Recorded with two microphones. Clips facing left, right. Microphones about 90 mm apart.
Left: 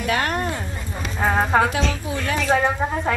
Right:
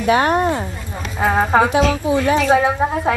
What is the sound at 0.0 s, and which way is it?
Speech, 20° right (ahead or behind).